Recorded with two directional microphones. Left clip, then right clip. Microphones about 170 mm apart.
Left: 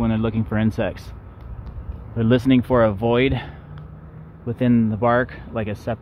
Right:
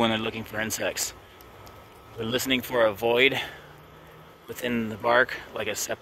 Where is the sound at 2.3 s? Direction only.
15° left (ahead or behind).